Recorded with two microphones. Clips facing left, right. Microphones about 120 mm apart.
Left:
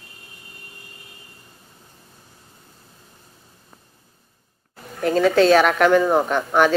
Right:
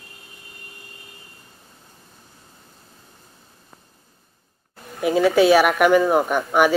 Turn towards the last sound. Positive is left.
turn(degrees=-10)  # may be behind; listen again after turning